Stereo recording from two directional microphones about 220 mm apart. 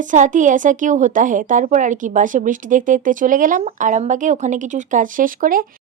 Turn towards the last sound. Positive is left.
turn(degrees=-40)  # may be behind; listen again after turning